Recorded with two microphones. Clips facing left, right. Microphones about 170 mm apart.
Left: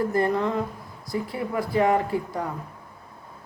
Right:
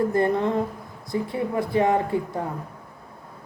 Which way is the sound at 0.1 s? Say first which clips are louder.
Right 2 dB; 25° right (ahead or behind).